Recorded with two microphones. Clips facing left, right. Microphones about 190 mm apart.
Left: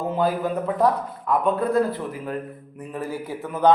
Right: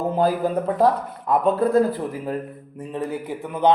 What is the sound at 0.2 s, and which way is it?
Speech, 35° right (ahead or behind).